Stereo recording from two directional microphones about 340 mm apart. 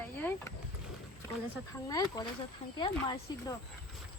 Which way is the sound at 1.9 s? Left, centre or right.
Centre.